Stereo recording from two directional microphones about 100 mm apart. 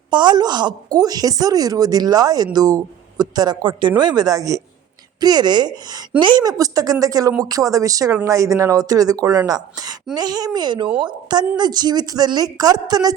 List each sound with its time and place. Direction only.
0.1 s a woman's voice: 50° right (ahead or behind)